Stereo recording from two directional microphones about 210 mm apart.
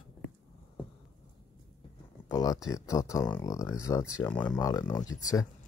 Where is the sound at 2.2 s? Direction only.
15° left (ahead or behind).